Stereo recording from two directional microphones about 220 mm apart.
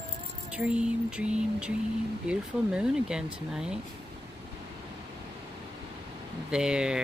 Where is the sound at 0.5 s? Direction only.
5° right (ahead or behind).